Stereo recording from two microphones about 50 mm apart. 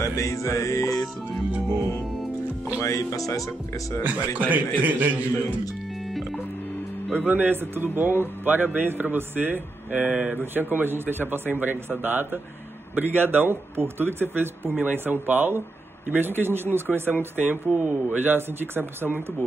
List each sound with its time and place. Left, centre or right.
0.0 s music: left
2.8 s music: left
4.0 s a man's voice: right
6.0 s music: centre
7.1 s speech: right
9.8 s speech: right
10.3 s speech: right